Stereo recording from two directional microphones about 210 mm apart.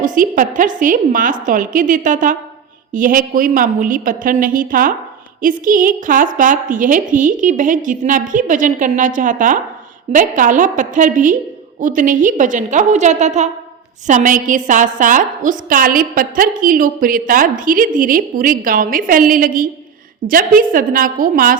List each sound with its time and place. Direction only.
0.0 s a woman's voice: 40° right (ahead or behind)